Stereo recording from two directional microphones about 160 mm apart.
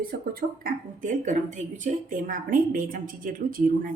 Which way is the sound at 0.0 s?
65° right (ahead or behind).